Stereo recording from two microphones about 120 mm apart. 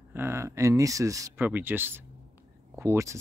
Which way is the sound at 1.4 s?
15° right (ahead or behind).